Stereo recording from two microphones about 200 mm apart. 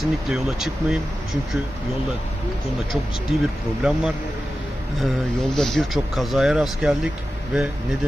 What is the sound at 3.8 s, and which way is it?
Speech, 5° right (ahead or behind).